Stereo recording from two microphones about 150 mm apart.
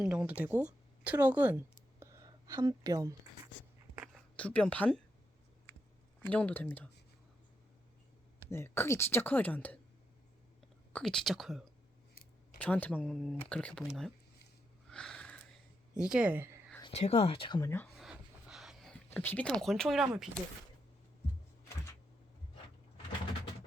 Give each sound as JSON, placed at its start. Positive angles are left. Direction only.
{"t": 0.0, "sound": "a woman's voice", "side_deg": -5}
{"t": 4.1, "sound": "speech", "side_deg": 10}
{"t": 6.2, "sound": "speech", "side_deg": 10}
{"t": 8.4, "sound": "speech", "side_deg": 15}
{"t": 10.9, "sound": "speech", "side_deg": 5}
{"t": 14.8, "sound": "sniff", "side_deg": 5}
{"t": 16.0, "sound": "speech", "side_deg": -5}
{"t": 16.8, "sound": "speech", "side_deg": 45}
{"t": 17.6, "sound": "speech", "side_deg": 15}
{"t": 17.8, "sound": "a sound", "side_deg": 0}
{"t": 19.1, "sound": "speech", "side_deg": 10}